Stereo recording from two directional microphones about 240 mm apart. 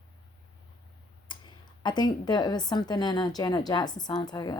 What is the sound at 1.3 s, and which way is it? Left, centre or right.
Speech, centre.